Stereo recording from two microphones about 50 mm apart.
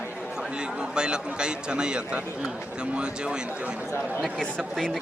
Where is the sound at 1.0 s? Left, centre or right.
Centre.